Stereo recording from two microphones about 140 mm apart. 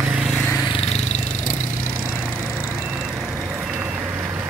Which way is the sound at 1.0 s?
60° left (ahead or behind).